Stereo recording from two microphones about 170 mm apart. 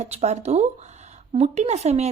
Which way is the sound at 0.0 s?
40° right (ahead or behind).